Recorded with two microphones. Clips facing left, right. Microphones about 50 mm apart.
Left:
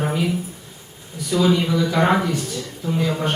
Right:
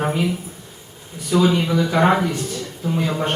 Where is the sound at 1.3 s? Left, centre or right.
Right.